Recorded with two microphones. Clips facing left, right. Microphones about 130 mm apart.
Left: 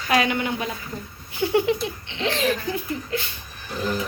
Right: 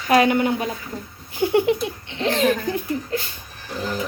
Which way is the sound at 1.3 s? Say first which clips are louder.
Right 2 dB; 45° right (ahead or behind).